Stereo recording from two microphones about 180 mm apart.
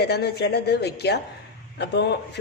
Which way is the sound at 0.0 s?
65° left (ahead or behind).